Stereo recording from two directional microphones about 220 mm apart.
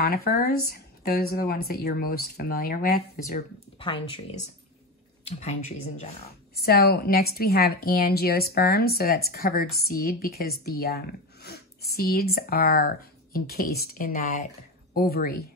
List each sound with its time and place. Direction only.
0.0 s a woman's voice: 45° left (ahead or behind)
3.7 s speech: 25° left (ahead or behind)
6.5 s a woman's voice: 45° left (ahead or behind)